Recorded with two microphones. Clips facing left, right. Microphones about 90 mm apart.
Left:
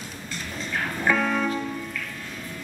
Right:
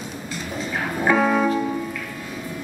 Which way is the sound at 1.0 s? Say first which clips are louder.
Right 6 dB; 15° right (ahead or behind).